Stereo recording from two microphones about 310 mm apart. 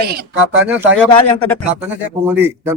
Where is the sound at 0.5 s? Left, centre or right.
Centre.